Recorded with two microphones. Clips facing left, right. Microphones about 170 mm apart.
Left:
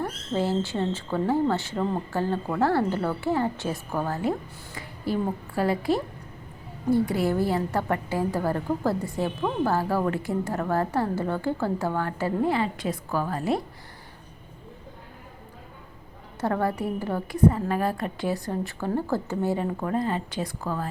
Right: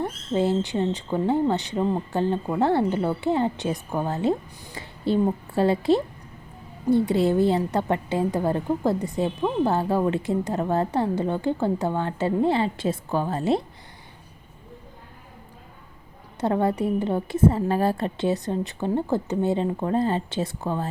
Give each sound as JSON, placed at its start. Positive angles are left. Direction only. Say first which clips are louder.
{"t": 0.0, "sound": "a woman's voice", "louder": "right 3 dB", "side_deg": -20}
{"t": 16.4, "sound": "a woman's voice", "louder": "right 3 dB", "side_deg": -20}